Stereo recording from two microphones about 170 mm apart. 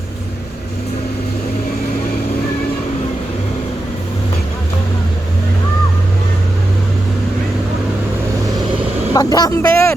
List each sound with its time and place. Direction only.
9.1 s speech: 20° left (ahead or behind)